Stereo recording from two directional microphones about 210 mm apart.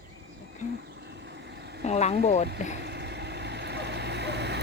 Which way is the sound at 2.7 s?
55° right (ahead or behind).